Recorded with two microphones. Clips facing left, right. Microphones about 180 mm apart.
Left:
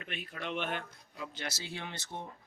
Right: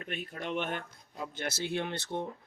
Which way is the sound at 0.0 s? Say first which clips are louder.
Right 3 dB; 45° right (ahead or behind).